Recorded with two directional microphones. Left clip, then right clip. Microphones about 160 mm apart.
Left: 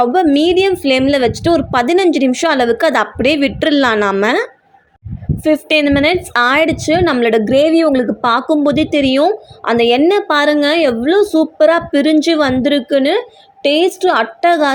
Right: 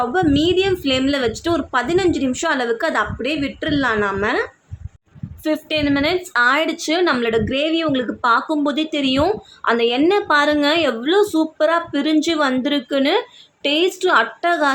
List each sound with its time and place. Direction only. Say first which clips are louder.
0.0 s a woman's voice: left 6 dB; 30° left (ahead or behind)
1.7 s a woman's voice: left 6 dB; 40° left (ahead or behind)
5.4 s a woman's voice: left 8 dB; 25° left (ahead or behind)
5.6 s a woman's voice: left 6 dB; 40° left (ahead or behind)